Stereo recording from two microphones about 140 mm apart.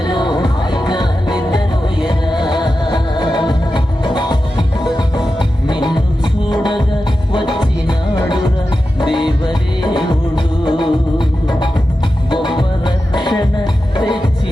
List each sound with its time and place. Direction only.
0.0 s music: 30° left (ahead or behind)